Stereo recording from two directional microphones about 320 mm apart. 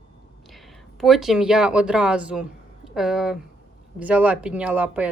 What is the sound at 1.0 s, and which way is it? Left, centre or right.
Speech, centre.